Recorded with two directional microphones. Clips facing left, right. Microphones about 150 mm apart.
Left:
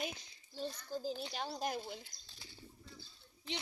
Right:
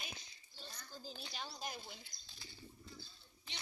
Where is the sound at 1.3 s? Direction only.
60° left (ahead or behind).